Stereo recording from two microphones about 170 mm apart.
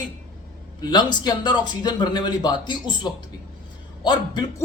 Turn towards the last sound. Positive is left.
turn(degrees=25)  # may be behind; listen again after turning